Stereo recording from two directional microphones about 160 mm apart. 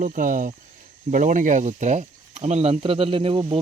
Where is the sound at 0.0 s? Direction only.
55° right (ahead or behind).